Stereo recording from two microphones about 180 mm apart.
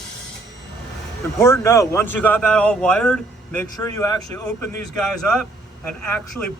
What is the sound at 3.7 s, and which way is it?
Speech, 20° left (ahead or behind).